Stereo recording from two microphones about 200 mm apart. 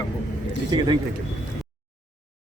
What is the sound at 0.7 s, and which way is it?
Speech, 20° right (ahead or behind).